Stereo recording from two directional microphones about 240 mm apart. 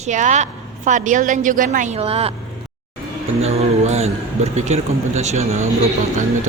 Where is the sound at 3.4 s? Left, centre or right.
Right.